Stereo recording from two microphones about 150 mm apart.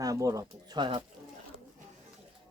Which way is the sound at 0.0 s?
20° right (ahead or behind).